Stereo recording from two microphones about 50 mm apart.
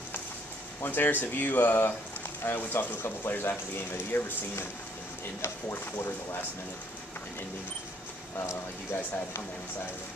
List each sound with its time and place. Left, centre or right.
0.8 s speech: left
5.4 s speech: left